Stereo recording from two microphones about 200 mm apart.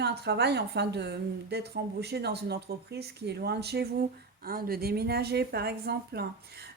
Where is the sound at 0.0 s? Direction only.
55° right (ahead or behind).